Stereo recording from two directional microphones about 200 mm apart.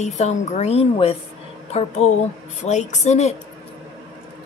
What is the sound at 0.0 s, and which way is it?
A woman's voice, 35° left (ahead or behind).